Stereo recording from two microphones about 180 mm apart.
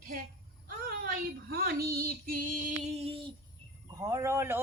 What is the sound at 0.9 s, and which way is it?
Female singing, 60° right (ahead or behind).